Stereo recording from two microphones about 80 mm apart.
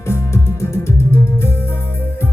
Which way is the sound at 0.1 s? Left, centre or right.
Left.